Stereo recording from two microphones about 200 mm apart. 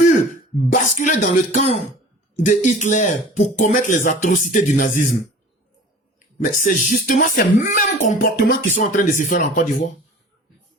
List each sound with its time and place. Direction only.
0.7 s music: 40° left (ahead or behind)
6.6 s music: 40° left (ahead or behind)